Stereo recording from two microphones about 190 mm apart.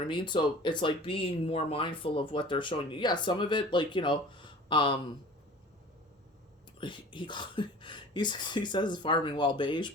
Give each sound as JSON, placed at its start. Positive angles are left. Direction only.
{"t": 0.1, "sound": "speech", "side_deg": 25}
{"t": 6.7, "sound": "speech", "side_deg": 25}